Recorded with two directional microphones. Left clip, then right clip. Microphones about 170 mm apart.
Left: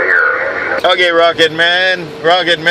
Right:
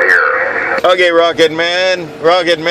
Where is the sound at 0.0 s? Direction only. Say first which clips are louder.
Right 1 dB; 50° right (ahead or behind).